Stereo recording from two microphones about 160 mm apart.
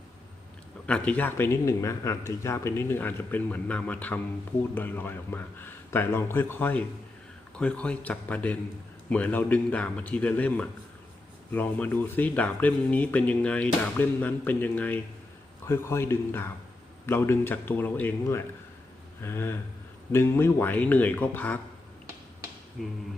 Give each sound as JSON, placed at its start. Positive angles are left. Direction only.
{"t": 0.9, "sound": "speech", "side_deg": 5}
{"t": 22.8, "sound": "speech", "side_deg": 0}